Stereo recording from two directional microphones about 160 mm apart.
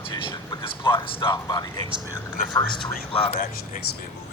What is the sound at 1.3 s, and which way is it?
A man's voice, 25° left (ahead or behind).